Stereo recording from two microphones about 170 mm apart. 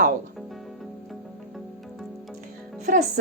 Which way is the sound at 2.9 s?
50° right (ahead or behind).